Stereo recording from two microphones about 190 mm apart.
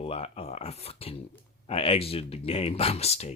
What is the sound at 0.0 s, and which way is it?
Speech, 30° left (ahead or behind).